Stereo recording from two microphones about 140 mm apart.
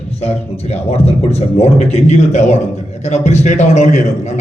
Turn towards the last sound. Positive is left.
turn(degrees=55)  # may be behind; listen again after turning